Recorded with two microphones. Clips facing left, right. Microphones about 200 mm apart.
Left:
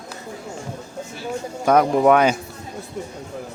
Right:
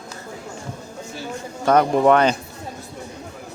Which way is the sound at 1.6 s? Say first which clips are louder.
Even; 5° left (ahead or behind).